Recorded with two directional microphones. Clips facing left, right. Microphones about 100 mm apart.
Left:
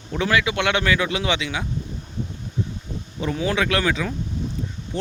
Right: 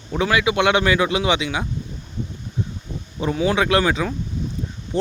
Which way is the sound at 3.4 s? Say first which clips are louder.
Right 4 dB; 25° right (ahead or behind).